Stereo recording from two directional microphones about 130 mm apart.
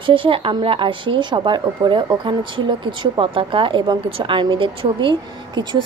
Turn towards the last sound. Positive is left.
turn(degrees=-35)  # may be behind; listen again after turning